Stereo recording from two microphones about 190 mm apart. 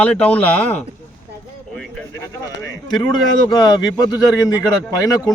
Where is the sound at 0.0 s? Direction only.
5° left (ahead or behind).